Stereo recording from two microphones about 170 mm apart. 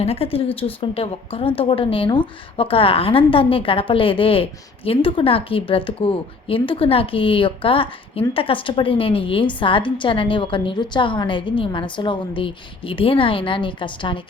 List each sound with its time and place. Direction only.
0.0 s a woman's voice: 35° left (ahead or behind)